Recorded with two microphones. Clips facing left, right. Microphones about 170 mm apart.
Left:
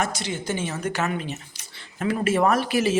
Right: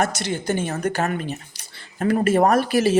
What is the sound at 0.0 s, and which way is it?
Speech, 55° right (ahead or behind).